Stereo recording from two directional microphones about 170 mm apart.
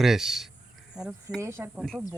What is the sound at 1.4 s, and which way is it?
Speech, 15° right (ahead or behind).